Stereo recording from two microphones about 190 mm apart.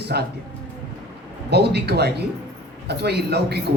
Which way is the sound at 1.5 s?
60° right (ahead or behind).